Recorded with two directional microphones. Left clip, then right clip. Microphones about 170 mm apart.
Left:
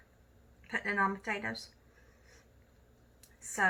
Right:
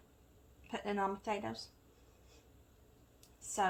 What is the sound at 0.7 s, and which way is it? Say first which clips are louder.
Speech: left 6 dB; 40° right (ahead or behind).